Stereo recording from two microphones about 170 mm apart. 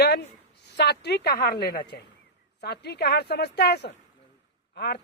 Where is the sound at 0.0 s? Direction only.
75° left (ahead or behind).